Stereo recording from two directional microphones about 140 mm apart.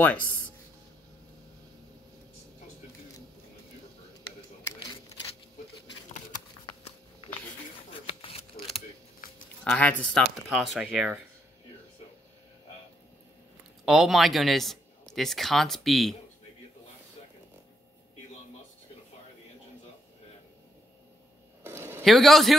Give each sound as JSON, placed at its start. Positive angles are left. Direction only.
{"t": 7.9, "sound": "shuffling cards", "side_deg": 40}
{"t": 9.7, "sound": "a man's voice", "side_deg": 10}
{"t": 13.8, "sound": "a man's voice", "side_deg": 0}
{"t": 21.6, "sound": "a sound", "side_deg": -15}
{"t": 22.0, "sound": "a man's voice", "side_deg": 0}